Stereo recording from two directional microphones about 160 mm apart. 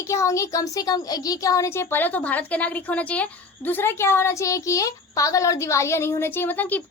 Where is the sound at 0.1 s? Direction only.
20° left (ahead or behind).